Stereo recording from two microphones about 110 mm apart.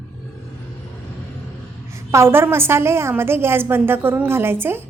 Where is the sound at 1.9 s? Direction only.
25° right (ahead or behind).